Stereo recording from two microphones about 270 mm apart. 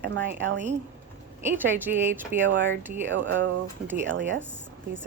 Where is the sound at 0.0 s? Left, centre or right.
Right.